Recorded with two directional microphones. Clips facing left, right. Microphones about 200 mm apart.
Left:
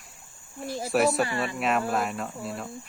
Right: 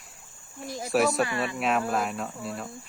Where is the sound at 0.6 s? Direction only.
30° left (ahead or behind).